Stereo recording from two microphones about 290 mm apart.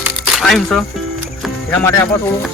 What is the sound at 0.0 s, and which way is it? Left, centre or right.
Music, centre.